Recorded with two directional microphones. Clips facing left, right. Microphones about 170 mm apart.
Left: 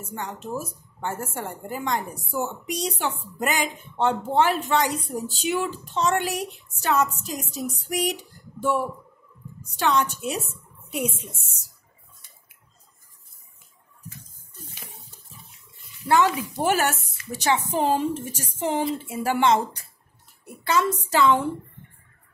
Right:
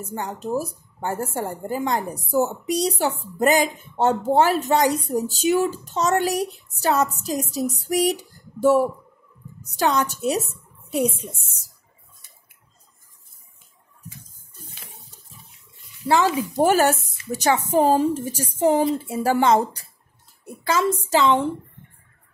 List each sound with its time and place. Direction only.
0.0 s speech: 35° right (ahead or behind)
16.5 s speech: 40° right (ahead or behind)
20.4 s a woman's voice: 30° right (ahead or behind)